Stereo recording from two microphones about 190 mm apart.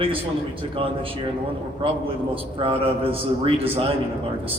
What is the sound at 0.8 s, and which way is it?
Speech, 30° right (ahead or behind).